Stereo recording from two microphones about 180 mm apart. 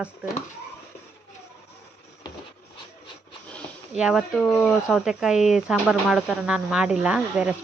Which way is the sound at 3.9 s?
5° right (ahead or behind).